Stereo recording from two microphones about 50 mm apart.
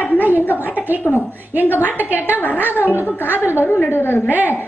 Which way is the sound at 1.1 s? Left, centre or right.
Centre.